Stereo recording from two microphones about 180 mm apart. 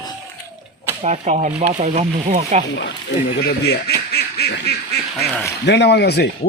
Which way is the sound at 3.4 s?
60° left (ahead or behind).